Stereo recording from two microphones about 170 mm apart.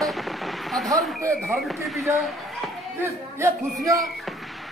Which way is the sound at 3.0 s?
15° right (ahead or behind).